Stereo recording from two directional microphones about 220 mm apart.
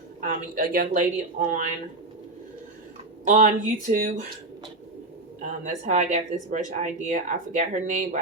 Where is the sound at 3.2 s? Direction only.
35° right (ahead or behind).